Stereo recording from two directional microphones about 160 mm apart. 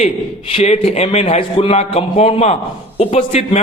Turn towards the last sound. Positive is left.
turn(degrees=40)  # may be behind; listen again after turning